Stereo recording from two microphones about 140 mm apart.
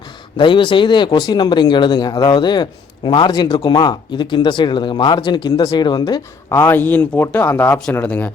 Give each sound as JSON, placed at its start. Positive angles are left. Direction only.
{"t": 0.3, "sound": "speech", "side_deg": 35}
{"t": 6.5, "sound": "speech", "side_deg": 15}